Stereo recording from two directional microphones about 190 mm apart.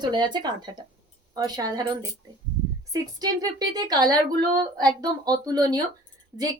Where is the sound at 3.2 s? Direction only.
20° right (ahead or behind).